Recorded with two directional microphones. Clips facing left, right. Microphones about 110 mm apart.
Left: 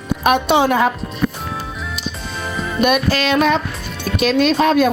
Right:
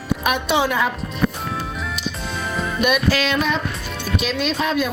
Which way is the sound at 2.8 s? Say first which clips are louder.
Left 3 dB; 50° left (ahead or behind).